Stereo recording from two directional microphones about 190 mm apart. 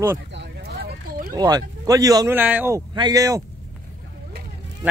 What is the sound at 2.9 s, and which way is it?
Speech, 20° right (ahead or behind).